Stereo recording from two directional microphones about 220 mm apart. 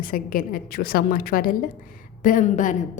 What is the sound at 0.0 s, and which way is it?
A woman's voice, 40° left (ahead or behind).